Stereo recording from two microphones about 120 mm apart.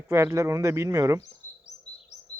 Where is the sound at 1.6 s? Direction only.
70° left (ahead or behind).